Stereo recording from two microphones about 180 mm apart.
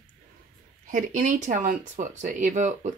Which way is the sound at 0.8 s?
45° right (ahead or behind).